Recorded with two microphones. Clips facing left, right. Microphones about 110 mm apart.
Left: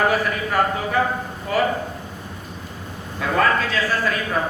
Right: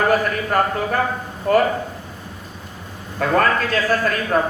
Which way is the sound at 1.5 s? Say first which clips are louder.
Right 6 dB; 50° right (ahead or behind).